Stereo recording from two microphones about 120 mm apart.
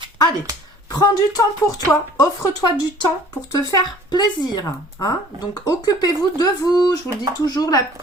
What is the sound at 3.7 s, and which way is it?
Speech, 35° left (ahead or behind).